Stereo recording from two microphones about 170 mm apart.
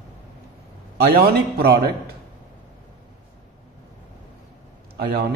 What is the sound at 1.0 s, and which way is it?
Speech, 65° right (ahead or behind).